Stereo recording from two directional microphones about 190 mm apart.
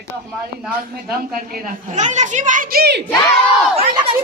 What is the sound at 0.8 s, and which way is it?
A woman's voice, 50° right (ahead or behind).